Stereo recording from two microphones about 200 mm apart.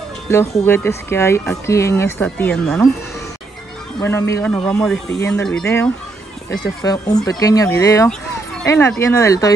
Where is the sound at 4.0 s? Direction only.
15° left (ahead or behind).